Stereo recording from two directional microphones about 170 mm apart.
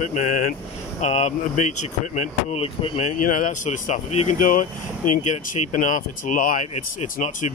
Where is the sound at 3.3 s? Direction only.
50° left (ahead or behind).